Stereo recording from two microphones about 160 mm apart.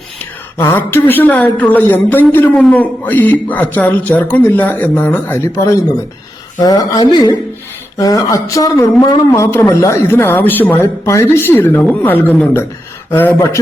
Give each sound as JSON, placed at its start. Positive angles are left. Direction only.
{"t": 0.5, "sound": "a woman's voice", "side_deg": 15}